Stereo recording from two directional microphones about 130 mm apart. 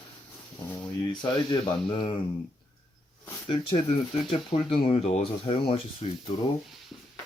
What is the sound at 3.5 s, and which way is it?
Speech, 40° left (ahead or behind).